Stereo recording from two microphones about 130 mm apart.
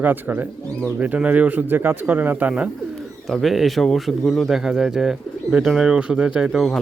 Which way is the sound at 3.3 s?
Centre (ahead or behind).